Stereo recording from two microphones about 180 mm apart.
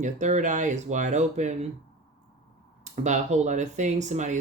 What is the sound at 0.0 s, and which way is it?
Speech, 40° right (ahead or behind).